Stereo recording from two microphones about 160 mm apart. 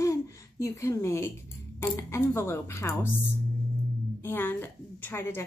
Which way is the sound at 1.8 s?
15° left (ahead or behind).